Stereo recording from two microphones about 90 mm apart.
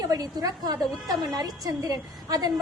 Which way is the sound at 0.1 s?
45° right (ahead or behind).